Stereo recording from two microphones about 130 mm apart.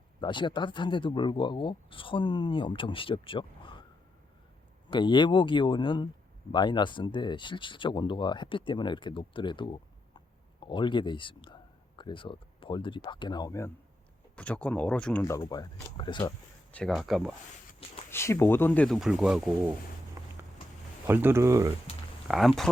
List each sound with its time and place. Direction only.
0.2 s speech: 35° left (ahead or behind)
4.9 s speech: 35° left (ahead or behind)
14.3 s speech: 10° left (ahead or behind)
15.2 s speech: 25° left (ahead or behind)
16.7 s speech: 5° left (ahead or behind)
18.1 s speech: 20° left (ahead or behind)
18.9 s speech: 5° right (ahead or behind)
20.2 s a sound: 25° right (ahead or behind)
21.1 s speech: 15° right (ahead or behind)
22.3 s speech: centre (ahead or behind)